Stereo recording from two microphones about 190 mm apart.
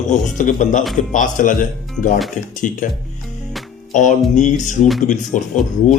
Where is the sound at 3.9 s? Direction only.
40° left (ahead or behind).